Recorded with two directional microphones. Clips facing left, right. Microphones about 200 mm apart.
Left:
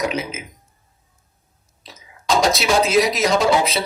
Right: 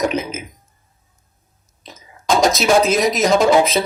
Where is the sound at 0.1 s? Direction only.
45° right (ahead or behind).